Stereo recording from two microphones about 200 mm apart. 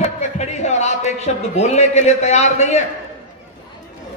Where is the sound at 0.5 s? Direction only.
35° left (ahead or behind).